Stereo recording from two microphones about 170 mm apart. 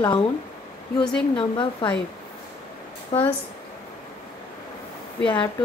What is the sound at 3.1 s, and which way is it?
Speech, 30° left (ahead or behind).